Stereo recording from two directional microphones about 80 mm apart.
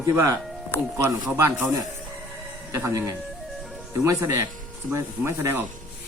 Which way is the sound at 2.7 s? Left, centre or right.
Right.